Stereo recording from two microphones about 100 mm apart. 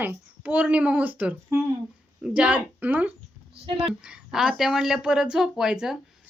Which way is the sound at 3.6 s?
65° right (ahead or behind).